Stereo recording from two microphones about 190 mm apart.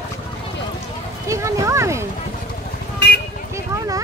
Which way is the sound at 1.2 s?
15° right (ahead or behind).